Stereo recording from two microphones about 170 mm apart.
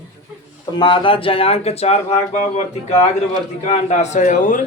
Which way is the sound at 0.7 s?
30° left (ahead or behind).